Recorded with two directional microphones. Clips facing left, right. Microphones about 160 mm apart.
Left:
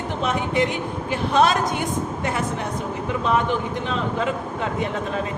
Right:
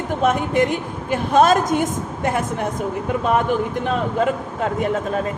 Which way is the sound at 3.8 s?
45° right (ahead or behind).